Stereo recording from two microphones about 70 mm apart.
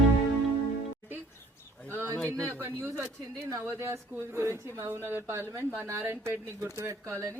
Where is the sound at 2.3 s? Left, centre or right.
Right.